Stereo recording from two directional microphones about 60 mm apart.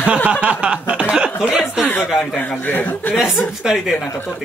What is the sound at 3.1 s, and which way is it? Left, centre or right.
Speech, centre.